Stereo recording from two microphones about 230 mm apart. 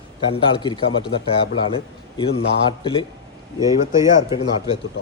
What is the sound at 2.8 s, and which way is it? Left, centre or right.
Speech, left.